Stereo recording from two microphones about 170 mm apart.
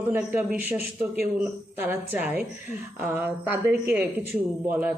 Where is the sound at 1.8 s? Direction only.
10° right (ahead or behind).